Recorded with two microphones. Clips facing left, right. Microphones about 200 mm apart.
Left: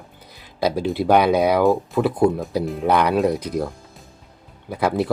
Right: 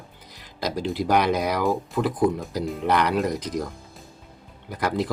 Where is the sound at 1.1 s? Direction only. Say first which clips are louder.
Left 6 dB; 60° left (ahead or behind).